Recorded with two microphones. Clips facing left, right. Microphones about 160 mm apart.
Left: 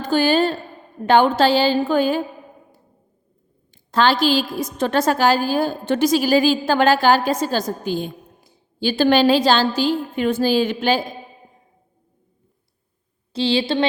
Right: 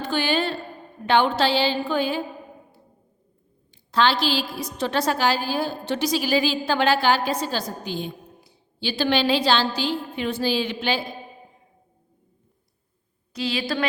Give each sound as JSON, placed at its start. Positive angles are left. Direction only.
{"t": 0.0, "sound": "a woman's voice", "side_deg": 40}
{"t": 3.9, "sound": "a woman's voice", "side_deg": 45}
{"t": 13.3, "sound": "a woman's voice", "side_deg": 30}